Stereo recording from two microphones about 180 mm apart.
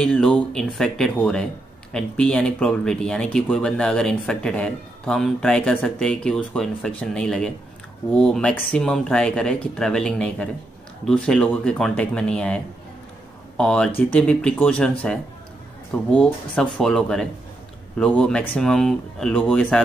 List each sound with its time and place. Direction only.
0.0 s speech: 5° left (ahead or behind)
13.6 s speech: 5° left (ahead or behind)